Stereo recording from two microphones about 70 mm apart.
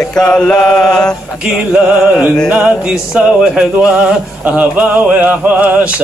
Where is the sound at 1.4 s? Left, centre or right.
Centre.